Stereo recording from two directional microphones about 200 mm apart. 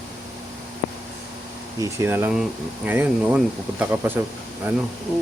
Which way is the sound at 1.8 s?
15° right (ahead or behind).